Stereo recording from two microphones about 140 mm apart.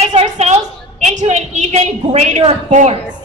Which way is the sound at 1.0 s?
55° right (ahead or behind).